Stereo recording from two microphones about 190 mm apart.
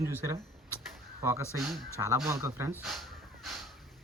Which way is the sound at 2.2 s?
15° right (ahead or behind).